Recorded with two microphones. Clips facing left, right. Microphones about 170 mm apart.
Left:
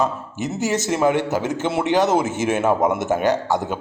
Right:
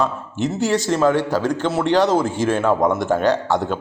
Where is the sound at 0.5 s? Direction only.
15° left (ahead or behind).